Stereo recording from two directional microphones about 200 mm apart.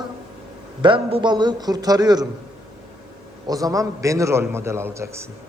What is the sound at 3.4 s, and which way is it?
Mantra, 15° right (ahead or behind).